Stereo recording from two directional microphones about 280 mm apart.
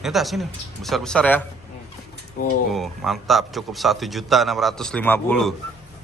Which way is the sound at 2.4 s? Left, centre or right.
Left.